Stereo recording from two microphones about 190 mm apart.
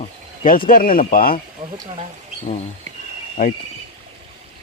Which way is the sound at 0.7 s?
50° left (ahead or behind).